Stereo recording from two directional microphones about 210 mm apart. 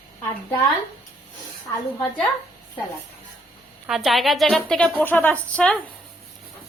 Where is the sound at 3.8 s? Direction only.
Centre (ahead or behind).